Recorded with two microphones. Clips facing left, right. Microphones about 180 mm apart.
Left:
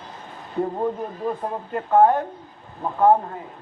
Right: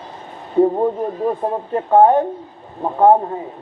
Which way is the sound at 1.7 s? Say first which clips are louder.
Right 5 dB; 25° right (ahead or behind).